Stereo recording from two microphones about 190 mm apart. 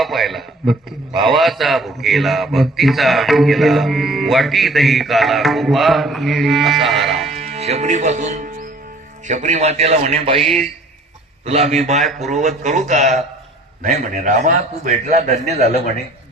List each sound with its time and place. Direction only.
0.0 s a man's voice: centre (ahead or behind)
7.3 s a man's voice: 35° right (ahead or behind)
10.4 s a man's voice: centre (ahead or behind)
11.4 s a man's voice: 35° right (ahead or behind)